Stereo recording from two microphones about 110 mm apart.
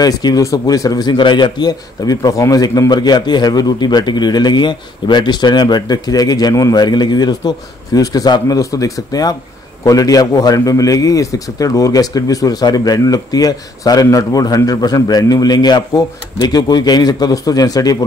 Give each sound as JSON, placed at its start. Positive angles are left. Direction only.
{"t": 0.0, "sound": "a man's voice", "side_deg": 35}